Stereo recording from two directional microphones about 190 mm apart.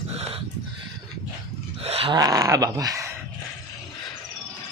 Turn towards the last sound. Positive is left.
turn(degrees=-15)  # may be behind; listen again after turning